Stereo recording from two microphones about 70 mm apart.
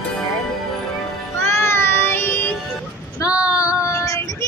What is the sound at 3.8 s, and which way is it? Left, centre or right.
Child singing, left.